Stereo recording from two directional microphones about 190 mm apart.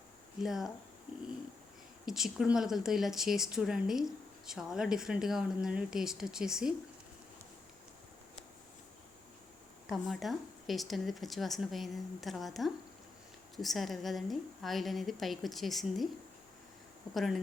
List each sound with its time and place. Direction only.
0.4 s speech: centre (ahead or behind)
2.0 s speech: centre (ahead or behind)
9.9 s speech: centre (ahead or behind)
17.2 s speech: centre (ahead or behind)